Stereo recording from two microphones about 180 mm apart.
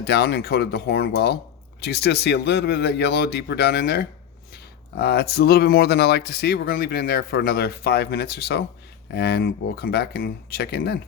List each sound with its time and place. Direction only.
0.0 s speech: 65° left (ahead or behind)